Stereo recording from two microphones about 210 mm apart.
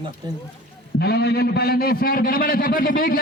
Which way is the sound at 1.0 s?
50° left (ahead or behind).